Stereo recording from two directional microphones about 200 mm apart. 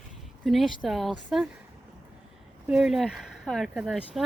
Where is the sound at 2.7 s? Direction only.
5° right (ahead or behind).